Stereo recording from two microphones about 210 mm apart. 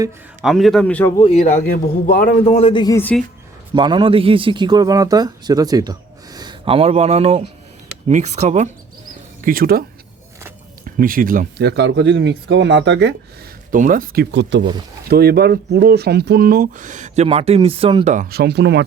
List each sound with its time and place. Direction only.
0.4 s speech: centre (ahead or behind)
1.2 s speech: 30° left (ahead or behind)
2.4 s speech: 25° left (ahead or behind); by 3.2 s 5° left (ahead or behind)
3.8 s a man's voice: 25° right (ahead or behind); by 9.8 s 45° right (ahead or behind)
10.8 s speech: 40° right (ahead or behind); by 13.1 s 55° right (ahead or behind)
13.7 s a man's voice: 40° right (ahead or behind)
18.1 s speech: 45° right (ahead or behind)